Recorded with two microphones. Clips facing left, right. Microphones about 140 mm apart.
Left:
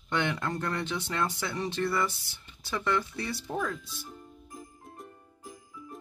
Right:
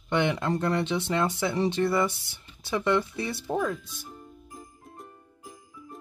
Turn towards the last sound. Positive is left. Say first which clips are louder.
# even
turn(degrees=0)  # may be behind; listen again after turning